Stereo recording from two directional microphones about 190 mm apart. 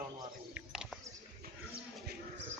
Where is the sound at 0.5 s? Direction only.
5° right (ahead or behind).